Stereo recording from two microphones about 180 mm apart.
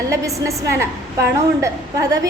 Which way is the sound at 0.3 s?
15° right (ahead or behind).